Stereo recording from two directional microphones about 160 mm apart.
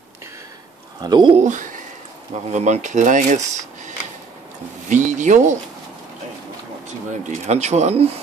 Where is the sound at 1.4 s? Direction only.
55° right (ahead or behind).